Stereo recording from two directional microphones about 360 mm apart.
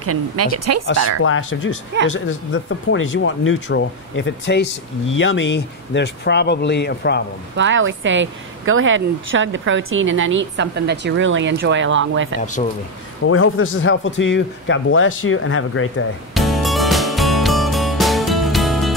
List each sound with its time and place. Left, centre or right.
0.0 s a woman's voice: right
1.2 s speech: left
7.5 s a woman's voice: right
12.4 s speech: left
13.2 s speech: left
16.3 s music: centre